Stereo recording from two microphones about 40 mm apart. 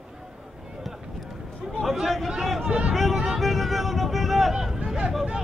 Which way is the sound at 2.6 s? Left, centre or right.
Right.